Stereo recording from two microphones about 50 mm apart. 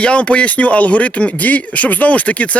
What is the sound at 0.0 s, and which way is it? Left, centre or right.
Speech, left.